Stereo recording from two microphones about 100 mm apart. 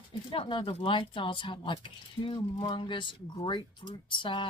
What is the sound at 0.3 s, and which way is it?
Speech, 55° left (ahead or behind).